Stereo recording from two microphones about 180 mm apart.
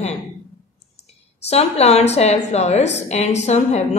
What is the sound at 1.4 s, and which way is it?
A woman's voice, 35° left (ahead or behind).